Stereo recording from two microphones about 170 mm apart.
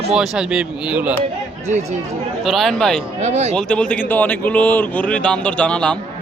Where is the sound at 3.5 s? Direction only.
5° left (ahead or behind).